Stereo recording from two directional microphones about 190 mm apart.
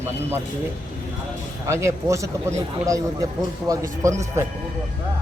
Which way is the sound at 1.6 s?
15° right (ahead or behind).